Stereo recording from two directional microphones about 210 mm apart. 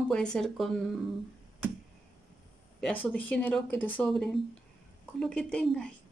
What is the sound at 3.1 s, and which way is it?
Speech, 5° left (ahead or behind).